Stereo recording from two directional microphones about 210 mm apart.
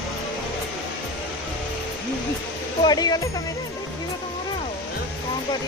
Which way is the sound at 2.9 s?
20° left (ahead or behind).